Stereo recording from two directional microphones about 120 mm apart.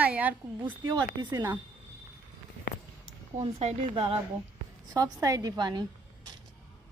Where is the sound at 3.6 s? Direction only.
55° right (ahead or behind).